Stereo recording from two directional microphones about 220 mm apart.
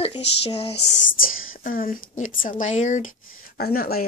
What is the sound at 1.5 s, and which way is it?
A woman's voice, 40° left (ahead or behind).